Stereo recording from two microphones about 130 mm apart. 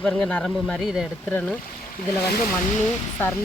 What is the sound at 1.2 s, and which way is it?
Speech, 10° left (ahead or behind).